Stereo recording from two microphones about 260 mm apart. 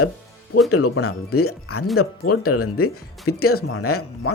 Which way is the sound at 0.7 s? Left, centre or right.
Left.